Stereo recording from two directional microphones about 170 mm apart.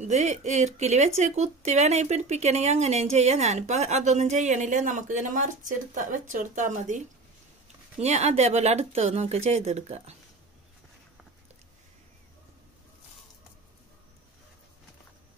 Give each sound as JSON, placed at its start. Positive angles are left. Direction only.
{"t": 0.0, "sound": "speech", "side_deg": -40}
{"t": 8.0, "sound": "speech", "side_deg": -40}